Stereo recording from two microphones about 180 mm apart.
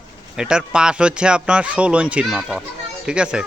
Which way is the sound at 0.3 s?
5° right (ahead or behind).